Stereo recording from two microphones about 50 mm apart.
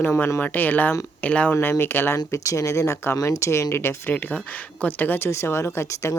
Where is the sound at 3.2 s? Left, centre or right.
Left.